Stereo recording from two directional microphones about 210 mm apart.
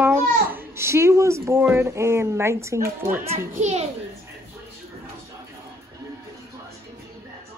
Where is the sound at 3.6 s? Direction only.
30° right (ahead or behind).